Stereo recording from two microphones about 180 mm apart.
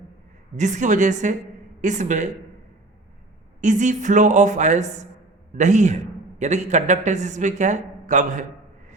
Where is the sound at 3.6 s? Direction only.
45° right (ahead or behind).